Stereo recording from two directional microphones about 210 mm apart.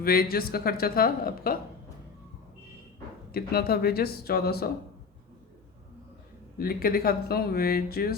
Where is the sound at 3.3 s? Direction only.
45° left (ahead or behind).